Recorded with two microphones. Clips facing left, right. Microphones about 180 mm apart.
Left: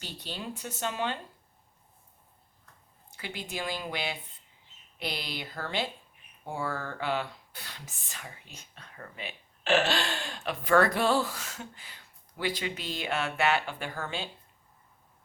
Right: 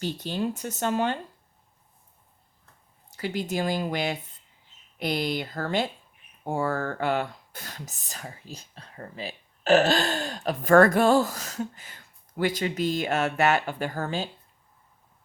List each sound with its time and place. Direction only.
0.0 s speech: 45° right (ahead or behind)
3.1 s speech: 40° right (ahead or behind)